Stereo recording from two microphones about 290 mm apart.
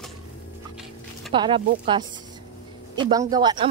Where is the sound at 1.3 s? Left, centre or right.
Centre.